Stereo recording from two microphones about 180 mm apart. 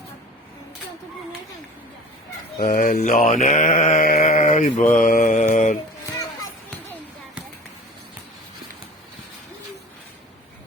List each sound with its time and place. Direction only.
2.6 s mantra: 50° left (ahead or behind)